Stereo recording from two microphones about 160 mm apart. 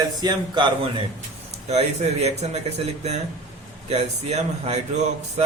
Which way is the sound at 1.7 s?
40° right (ahead or behind).